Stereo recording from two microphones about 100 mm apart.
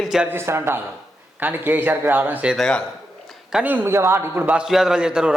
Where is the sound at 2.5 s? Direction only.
5° left (ahead or behind).